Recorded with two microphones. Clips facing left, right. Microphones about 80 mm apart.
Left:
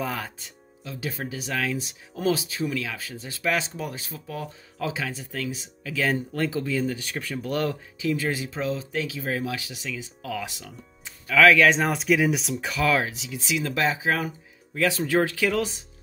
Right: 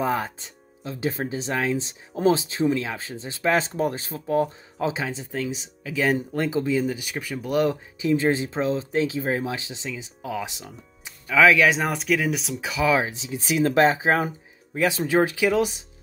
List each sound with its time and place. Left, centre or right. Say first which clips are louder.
0.0 s speech: right 6 dB; right
4.7 s speech: right 3 dB; right
13.1 s speech: right 3 dB; right